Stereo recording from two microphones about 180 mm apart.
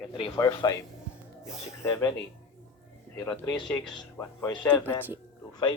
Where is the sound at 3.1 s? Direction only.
10° left (ahead or behind).